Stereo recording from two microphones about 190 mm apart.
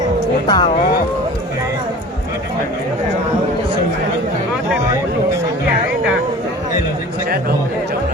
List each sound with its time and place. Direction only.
0.4 s speech: 20° left (ahead or behind)